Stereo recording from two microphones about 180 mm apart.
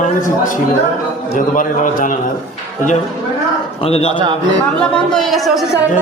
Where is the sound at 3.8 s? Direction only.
35° left (ahead or behind).